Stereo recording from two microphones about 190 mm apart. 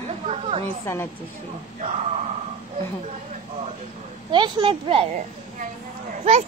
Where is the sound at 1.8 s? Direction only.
35° right (ahead or behind).